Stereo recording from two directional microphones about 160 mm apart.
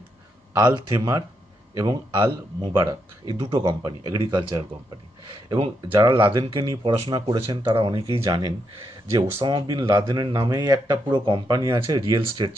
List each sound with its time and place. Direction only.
0.8 s speech: 25° right (ahead or behind)